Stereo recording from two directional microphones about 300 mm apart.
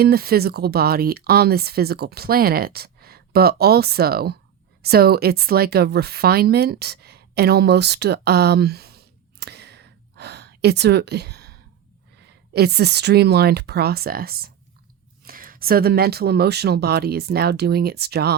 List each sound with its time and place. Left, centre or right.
0.0 s speech: right
12.5 s speech: right